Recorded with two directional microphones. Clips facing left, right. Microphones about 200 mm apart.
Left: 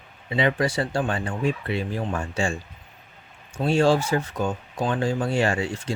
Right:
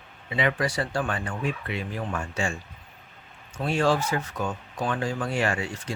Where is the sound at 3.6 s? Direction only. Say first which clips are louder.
Left 4 dB; 30° left (ahead or behind).